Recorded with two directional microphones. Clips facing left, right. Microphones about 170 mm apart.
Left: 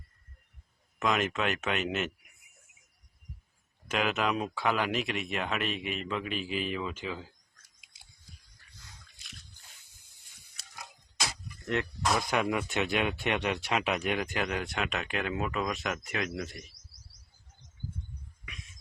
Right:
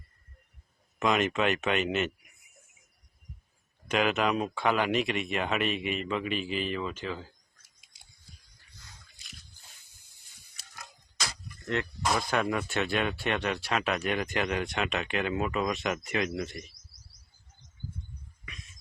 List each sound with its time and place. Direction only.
0.9 s speech: centre (ahead or behind)
3.8 s speech: centre (ahead or behind)
11.6 s speech: 20° left (ahead or behind)
12.0 s speech: centre (ahead or behind)
12.3 s speech: 15° left (ahead or behind)